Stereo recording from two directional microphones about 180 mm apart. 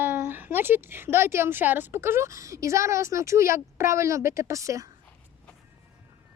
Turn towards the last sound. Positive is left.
turn(degrees=-15)  # may be behind; listen again after turning